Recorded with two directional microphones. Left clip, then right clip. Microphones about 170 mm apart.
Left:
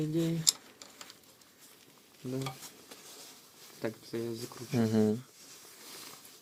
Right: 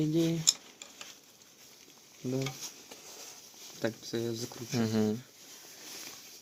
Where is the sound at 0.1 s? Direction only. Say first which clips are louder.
Right 3 dB; 55° right (ahead or behind).